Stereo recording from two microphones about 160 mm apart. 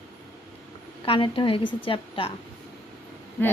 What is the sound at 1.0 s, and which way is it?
A woman's voice, 35° left (ahead or behind).